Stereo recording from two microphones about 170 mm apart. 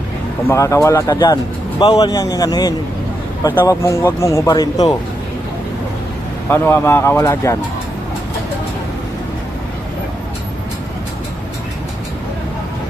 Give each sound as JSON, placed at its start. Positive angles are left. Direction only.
{"t": 0.4, "sound": "speech", "side_deg": 15}
{"t": 6.5, "sound": "speech", "side_deg": 15}